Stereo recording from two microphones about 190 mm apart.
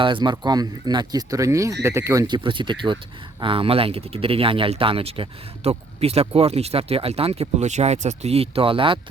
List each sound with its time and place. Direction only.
0.0 s speech: 25° right (ahead or behind)